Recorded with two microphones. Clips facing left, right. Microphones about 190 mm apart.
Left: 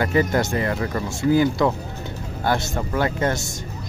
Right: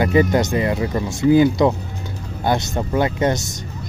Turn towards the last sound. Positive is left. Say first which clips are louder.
# right 3 dB
turn(degrees=-20)  # may be behind; listen again after turning